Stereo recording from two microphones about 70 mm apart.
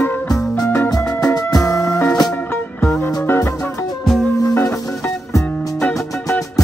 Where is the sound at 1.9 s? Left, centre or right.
Centre.